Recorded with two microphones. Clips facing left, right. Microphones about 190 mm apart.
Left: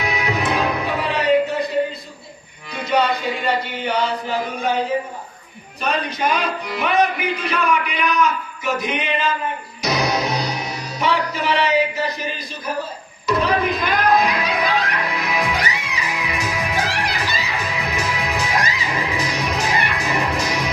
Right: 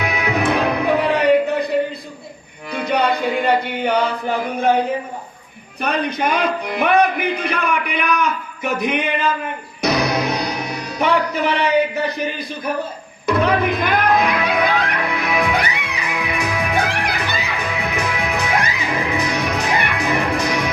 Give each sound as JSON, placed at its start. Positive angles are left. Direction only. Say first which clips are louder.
{"t": 0.0, "sound": "music", "louder": "right 3 dB", "side_deg": -60}
{"t": 1.1, "sound": "a sound", "louder": "left 1 dB", "side_deg": -60}
{"t": 2.7, "sound": "chant", "louder": "right 1 dB", "side_deg": -60}
{"t": 5.8, "sound": "a man's voice", "louder": "right 2 dB", "side_deg": -60}
{"t": 9.8, "sound": "music", "louder": "right 2 dB", "side_deg": -60}